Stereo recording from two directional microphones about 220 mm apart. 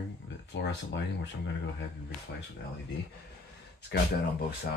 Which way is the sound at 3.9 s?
50° left (ahead or behind).